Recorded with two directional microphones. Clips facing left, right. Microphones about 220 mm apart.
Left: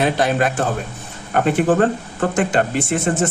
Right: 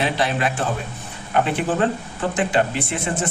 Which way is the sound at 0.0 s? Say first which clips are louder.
Left 4 dB; 45° left (ahead or behind).